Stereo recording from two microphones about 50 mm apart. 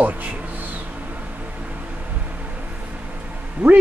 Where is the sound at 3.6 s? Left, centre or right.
Right.